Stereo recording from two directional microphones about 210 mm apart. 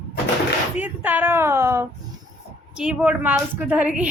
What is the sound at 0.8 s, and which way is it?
A woman's voice, 10° right (ahead or behind).